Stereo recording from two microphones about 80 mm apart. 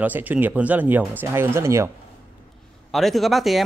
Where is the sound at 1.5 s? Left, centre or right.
Right.